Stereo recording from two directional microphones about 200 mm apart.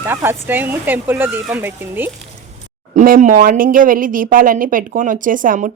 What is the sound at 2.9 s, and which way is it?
Speech, 40° right (ahead or behind).